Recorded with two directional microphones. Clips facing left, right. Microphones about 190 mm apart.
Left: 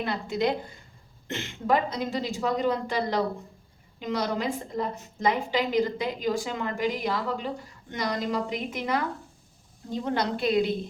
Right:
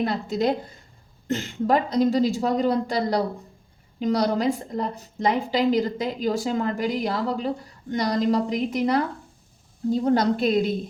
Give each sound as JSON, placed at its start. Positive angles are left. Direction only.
{"t": 0.0, "sound": "a woman's voice", "side_deg": -40}